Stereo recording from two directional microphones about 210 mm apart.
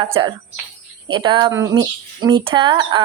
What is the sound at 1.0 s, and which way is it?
Speech, 25° right (ahead or behind).